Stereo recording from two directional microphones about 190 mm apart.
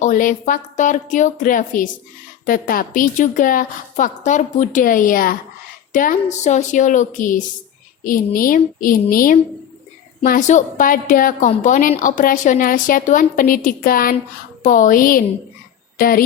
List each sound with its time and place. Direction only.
0.0 s a woman's voice: 40° left (ahead or behind)